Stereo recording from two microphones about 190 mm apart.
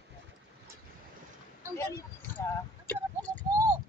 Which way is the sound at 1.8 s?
15° left (ahead or behind).